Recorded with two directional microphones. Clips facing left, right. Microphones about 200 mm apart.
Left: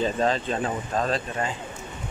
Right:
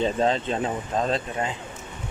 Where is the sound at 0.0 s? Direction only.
25° right (ahead or behind).